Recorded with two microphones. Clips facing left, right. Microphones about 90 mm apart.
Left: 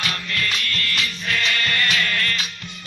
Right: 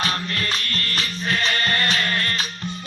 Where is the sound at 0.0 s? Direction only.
35° right (ahead or behind).